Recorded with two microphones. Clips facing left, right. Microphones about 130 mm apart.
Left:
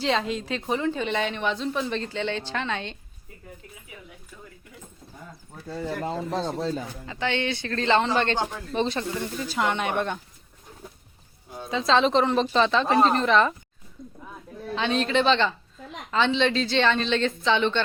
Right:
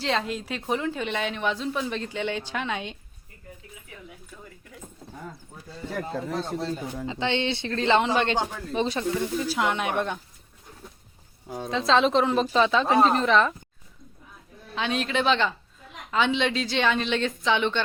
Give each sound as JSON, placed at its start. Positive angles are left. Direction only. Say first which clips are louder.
{"t": 0.0, "sound": "a woman's voice", "louder": "left 2 dB", "side_deg": 0}
{"t": 5.6, "sound": "speech", "louder": "left 4 dB", "side_deg": 80}
{"t": 7.0, "sound": "speech", "louder": "right 2 dB", "side_deg": -20}
{"t": 11.7, "sound": "a woman's voice", "louder": "even", "side_deg": 0}
{"t": 14.8, "sound": "speech", "louder": "left 3 dB", "side_deg": -5}